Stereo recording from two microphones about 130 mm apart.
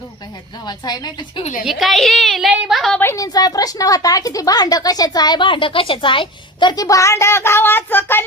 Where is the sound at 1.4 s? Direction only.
65° left (ahead or behind).